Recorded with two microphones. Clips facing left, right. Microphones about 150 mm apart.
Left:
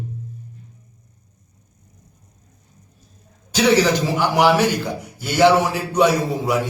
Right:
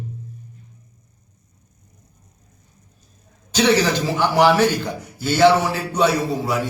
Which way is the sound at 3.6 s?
15° left (ahead or behind).